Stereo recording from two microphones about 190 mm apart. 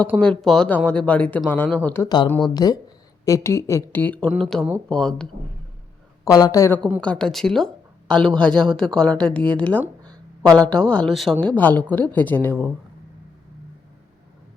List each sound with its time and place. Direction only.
0.2 s speech: 5° left (ahead or behind)
6.2 s speech: 20° left (ahead or behind)